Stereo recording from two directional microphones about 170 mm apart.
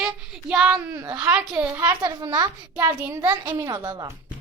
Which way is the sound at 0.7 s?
15° right (ahead or behind).